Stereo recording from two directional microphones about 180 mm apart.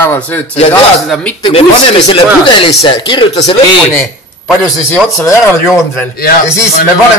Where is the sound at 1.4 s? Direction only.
25° left (ahead or behind).